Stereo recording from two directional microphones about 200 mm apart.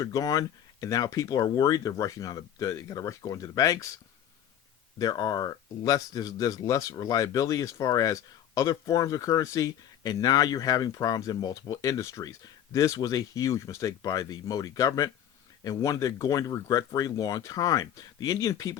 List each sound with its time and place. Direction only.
0.0 s speech: 20° left (ahead or behind)
4.9 s speech: 20° left (ahead or behind)